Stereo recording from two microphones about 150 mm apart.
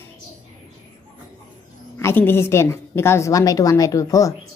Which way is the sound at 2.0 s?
15° left (ahead or behind).